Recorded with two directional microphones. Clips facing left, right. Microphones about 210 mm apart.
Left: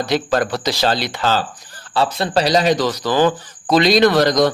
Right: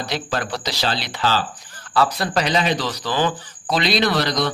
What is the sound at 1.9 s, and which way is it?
Speech, 25° left (ahead or behind).